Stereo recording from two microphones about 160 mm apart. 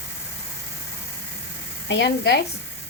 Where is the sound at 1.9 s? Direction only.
90° left.